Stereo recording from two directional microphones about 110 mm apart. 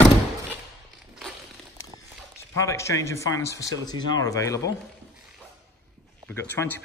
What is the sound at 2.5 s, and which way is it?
Speech, 25° left (ahead or behind).